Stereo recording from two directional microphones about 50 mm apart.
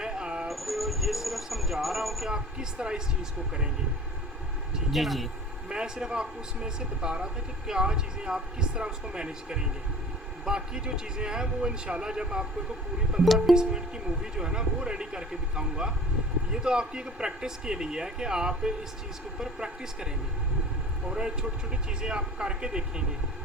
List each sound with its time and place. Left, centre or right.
0.0 s a sound: centre
0.4 s a sound: centre
2.3 s speech: centre
4.9 s speech: centre
5.6 s speech: centre
13.2 s speech: centre
13.6 s speech: centre
21.1 s speech: centre